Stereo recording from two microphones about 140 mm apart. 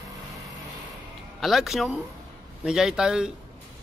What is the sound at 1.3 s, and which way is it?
Speech, centre (ahead or behind).